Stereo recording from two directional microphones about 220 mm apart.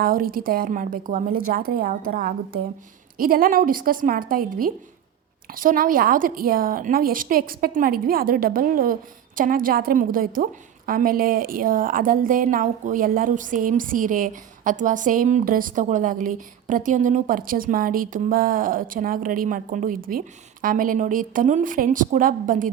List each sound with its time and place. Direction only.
0.0 s a woman's voice: 40° right (ahead or behind)